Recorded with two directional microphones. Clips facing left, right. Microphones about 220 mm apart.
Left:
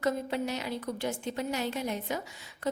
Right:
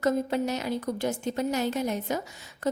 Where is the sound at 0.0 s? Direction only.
45° right (ahead or behind).